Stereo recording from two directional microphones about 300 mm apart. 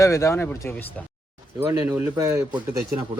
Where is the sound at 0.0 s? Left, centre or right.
Centre.